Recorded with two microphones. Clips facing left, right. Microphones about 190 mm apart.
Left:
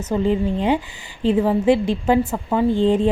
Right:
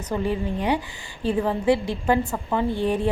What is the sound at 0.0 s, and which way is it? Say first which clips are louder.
A woman's voice: left 6 dB; 20° left (ahead or behind).